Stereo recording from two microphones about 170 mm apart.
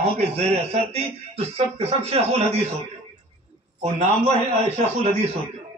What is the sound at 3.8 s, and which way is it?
Speech, 40° right (ahead or behind).